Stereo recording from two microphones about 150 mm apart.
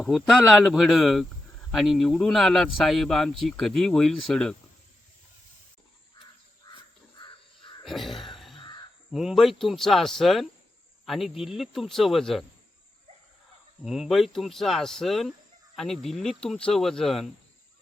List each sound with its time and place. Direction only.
0.0 s speech: centre (ahead or behind)
7.2 s crow: 35° left (ahead or behind)
7.9 s caw: centre (ahead or behind)
8.5 s crow: 30° left (ahead or behind)
9.1 s speech: centre (ahead or behind)
13.8 s speech: centre (ahead or behind)